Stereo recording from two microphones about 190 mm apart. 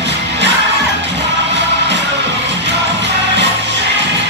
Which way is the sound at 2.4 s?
65° right (ahead or behind).